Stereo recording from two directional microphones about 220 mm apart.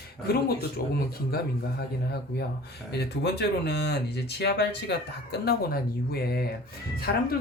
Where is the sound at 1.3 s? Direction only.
45° left (ahead or behind).